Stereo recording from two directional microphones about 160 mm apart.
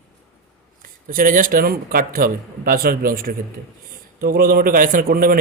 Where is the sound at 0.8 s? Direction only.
60° right (ahead or behind).